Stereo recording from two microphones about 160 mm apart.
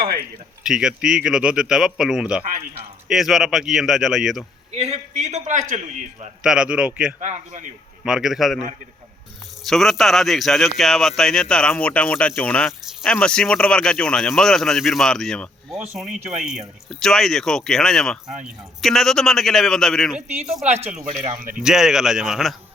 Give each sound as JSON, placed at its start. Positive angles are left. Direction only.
{"t": 0.6, "sound": "speech", "side_deg": -5}
{"t": 4.7, "sound": "a man's voice", "side_deg": -40}
{"t": 6.4, "sound": "speech", "side_deg": -5}
{"t": 7.2, "sound": "a man's voice", "side_deg": -45}
{"t": 8.0, "sound": "speech", "side_deg": -5}
{"t": 9.6, "sound": "speech", "side_deg": 0}